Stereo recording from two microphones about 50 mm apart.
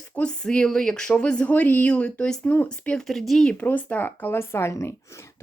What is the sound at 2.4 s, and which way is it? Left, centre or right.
Speech, left.